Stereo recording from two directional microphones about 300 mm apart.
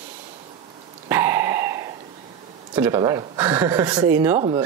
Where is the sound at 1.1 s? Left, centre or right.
Centre.